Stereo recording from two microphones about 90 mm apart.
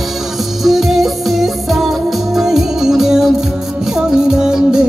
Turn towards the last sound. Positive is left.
turn(degrees=-10)  # may be behind; listen again after turning